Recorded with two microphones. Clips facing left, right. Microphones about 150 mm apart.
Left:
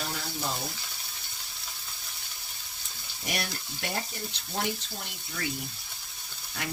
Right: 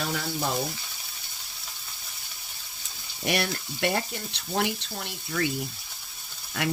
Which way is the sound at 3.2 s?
80° right.